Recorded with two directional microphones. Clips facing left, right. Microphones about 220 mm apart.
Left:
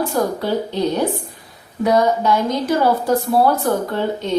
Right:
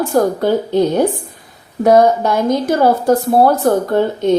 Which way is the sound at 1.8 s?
45° right (ahead or behind).